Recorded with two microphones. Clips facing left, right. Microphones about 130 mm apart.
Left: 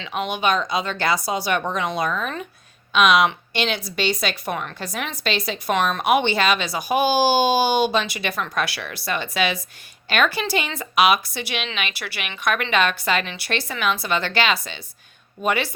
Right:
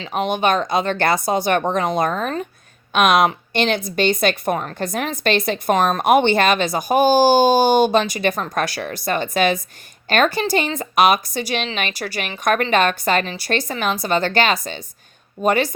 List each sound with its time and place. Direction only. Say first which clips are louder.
0.0 s a woman's voice: right 4 dB; 40° right (ahead or behind)